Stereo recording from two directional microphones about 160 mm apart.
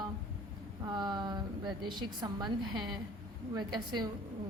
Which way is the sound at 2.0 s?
25° right (ahead or behind).